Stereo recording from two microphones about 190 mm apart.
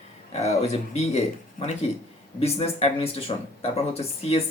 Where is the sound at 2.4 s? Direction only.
30° left (ahead or behind).